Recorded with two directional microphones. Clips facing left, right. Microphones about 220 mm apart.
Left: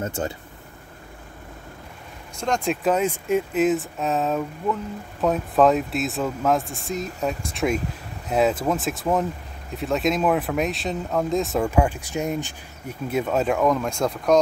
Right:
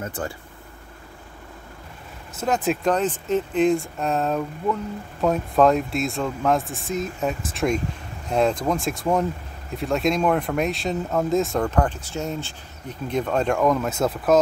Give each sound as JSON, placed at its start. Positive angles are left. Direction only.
{"t": 0.0, "sound": "speech", "side_deg": 25}
{"t": 2.3, "sound": "speech", "side_deg": -5}